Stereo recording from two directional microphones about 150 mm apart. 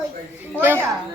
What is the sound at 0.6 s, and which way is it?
Speech, 15° right (ahead or behind).